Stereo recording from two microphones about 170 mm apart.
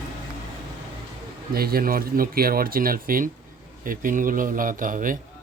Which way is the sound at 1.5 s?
65° right (ahead or behind).